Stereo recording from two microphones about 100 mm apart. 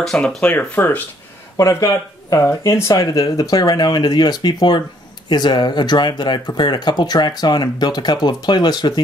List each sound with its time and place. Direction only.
0.0 s speech: 5° left (ahead or behind)
1.6 s speech: 30° left (ahead or behind)